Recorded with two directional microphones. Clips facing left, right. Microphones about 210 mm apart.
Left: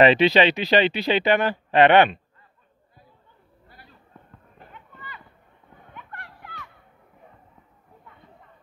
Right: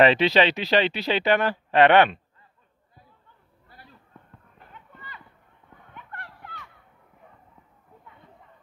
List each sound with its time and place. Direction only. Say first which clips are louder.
0.0 s speech: left 2 dB; centre (ahead or behind)